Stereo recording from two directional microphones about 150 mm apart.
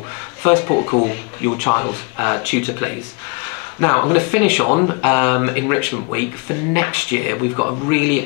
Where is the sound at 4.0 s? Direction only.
25° left (ahead or behind).